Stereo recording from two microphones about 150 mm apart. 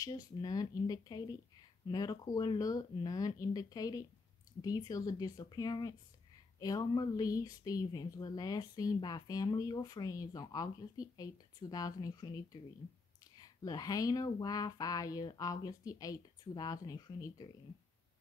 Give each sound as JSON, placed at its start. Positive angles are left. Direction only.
{"t": 0.0, "sound": "speech", "side_deg": 25}